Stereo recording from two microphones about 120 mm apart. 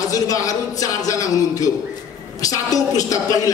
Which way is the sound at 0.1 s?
30° left (ahead or behind).